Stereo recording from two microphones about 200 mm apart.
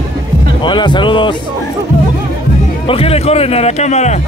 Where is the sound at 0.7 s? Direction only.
25° left (ahead or behind).